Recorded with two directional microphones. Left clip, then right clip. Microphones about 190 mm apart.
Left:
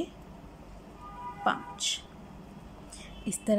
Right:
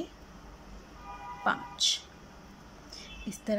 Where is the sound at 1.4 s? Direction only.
10° left (ahead or behind).